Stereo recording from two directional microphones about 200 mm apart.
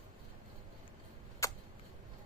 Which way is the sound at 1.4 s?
15° left (ahead or behind).